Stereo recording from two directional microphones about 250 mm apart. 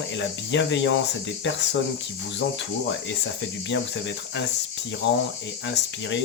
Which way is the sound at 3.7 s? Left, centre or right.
Left.